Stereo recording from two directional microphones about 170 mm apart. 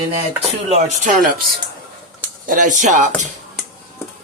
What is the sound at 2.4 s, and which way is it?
Speech, 50° right (ahead or behind).